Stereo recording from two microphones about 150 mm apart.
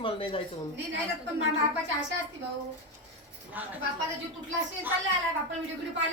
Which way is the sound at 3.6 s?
10° right (ahead or behind).